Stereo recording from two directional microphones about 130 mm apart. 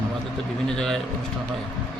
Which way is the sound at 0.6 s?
5° left (ahead or behind).